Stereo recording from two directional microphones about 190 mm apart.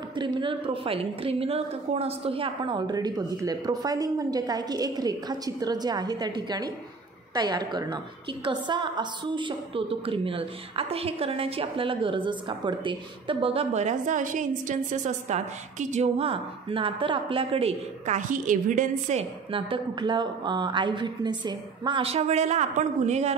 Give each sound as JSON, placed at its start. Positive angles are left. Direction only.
{"t": 0.1, "sound": "a woman's voice", "side_deg": -25}